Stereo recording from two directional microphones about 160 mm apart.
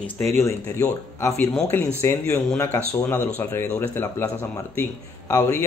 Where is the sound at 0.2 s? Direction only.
45° right (ahead or behind).